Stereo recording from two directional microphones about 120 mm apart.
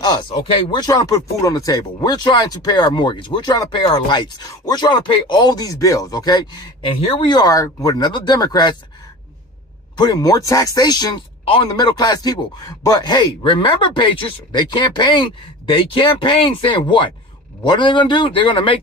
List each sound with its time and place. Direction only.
0.0 s speech: 35° left (ahead or behind); by 7.2 s 50° left (ahead or behind)
7.2 s speech: 35° left (ahead or behind)
9.9 s a man's voice: 35° left (ahead or behind)